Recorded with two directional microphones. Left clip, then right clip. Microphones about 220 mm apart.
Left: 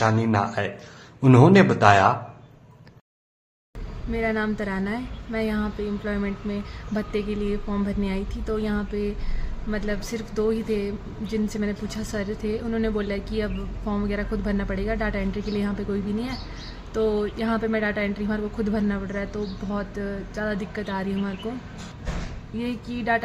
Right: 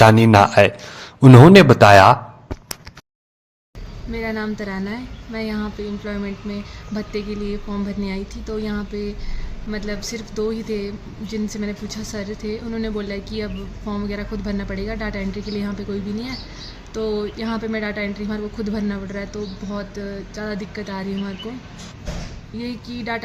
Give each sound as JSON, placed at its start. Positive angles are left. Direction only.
{"t": 0.0, "sound": "speech", "side_deg": -35}
{"t": 4.1, "sound": "speech", "side_deg": 5}
{"t": 22.6, "sound": "speech", "side_deg": 5}